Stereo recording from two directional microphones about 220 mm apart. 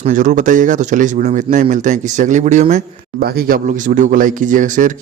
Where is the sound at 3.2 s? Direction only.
45° right (ahead or behind).